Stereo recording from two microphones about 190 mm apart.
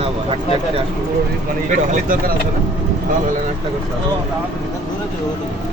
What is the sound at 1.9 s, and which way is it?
Speech, 45° right (ahead or behind).